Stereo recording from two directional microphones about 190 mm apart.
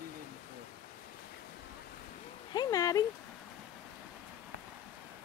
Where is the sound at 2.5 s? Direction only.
20° left (ahead or behind).